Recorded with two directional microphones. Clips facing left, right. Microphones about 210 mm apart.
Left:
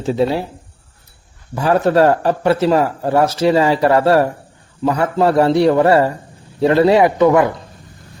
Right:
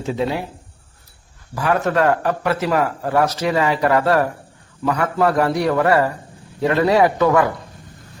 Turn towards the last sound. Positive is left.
turn(degrees=20)  # may be behind; listen again after turning